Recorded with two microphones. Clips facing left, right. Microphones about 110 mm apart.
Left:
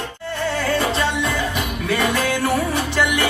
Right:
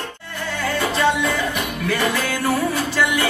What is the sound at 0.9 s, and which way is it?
Music, 25° left (ahead or behind).